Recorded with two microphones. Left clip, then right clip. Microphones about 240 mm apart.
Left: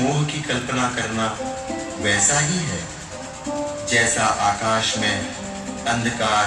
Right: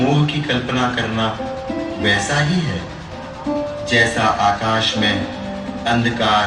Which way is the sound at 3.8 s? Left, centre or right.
Right.